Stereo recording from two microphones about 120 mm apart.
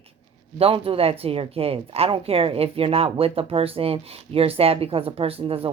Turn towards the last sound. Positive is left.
turn(degrees=-50)  # may be behind; listen again after turning